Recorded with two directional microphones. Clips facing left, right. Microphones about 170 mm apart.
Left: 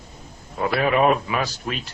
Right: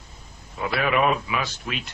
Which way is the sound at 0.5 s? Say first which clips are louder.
Left 3 dB; 40° left (ahead or behind).